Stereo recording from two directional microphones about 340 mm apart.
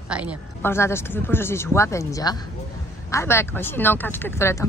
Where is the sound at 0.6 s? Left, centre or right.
Centre.